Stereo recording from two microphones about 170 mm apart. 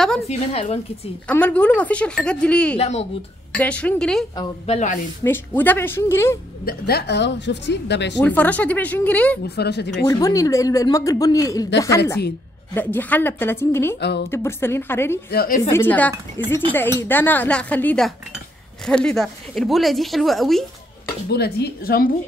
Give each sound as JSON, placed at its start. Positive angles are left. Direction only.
{"t": 0.3, "sound": "a woman's voice", "side_deg": 35}
{"t": 1.2, "sound": "a woman's voice", "side_deg": 10}
{"t": 2.8, "sound": "a woman's voice", "side_deg": 40}
{"t": 3.5, "sound": "a woman's voice", "side_deg": 5}
{"t": 4.6, "sound": "speech", "side_deg": 45}
{"t": 5.2, "sound": "a woman's voice", "side_deg": 10}
{"t": 6.6, "sound": "a woman's voice", "side_deg": 65}
{"t": 8.2, "sound": "a woman's voice", "side_deg": 10}
{"t": 9.4, "sound": "speech", "side_deg": 75}
{"t": 10.0, "sound": "a man's voice", "side_deg": 20}
{"t": 12.7, "sound": "a woman's voice", "side_deg": 10}
{"t": 15.3, "sound": "a woman's voice", "side_deg": 55}
{"t": 15.7, "sound": "a woman's voice", "side_deg": 10}
{"t": 21.3, "sound": "a woman's voice", "side_deg": 70}